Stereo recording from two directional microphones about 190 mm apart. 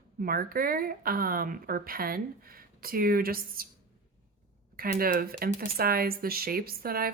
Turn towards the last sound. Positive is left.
turn(degrees=-50)  # may be behind; listen again after turning